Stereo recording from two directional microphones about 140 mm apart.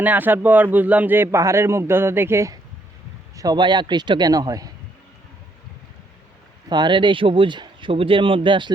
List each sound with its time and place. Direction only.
0.0 s a man's voice: 10° right (ahead or behind)
6.7 s speech: 35° right (ahead or behind)